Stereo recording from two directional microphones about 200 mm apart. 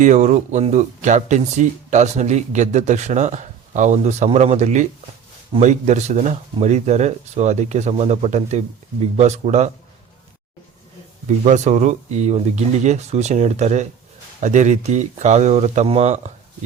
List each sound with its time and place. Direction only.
0.0 s speech: 35° right (ahead or behind)
11.3 s speech: 35° right (ahead or behind)